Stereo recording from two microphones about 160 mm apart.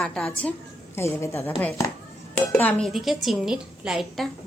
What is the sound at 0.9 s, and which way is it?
A woman's voice, 15° left (ahead or behind).